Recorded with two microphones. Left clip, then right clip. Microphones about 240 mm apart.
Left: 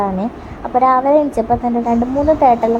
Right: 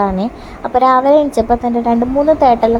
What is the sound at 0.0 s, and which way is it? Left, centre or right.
A woman's voice, centre.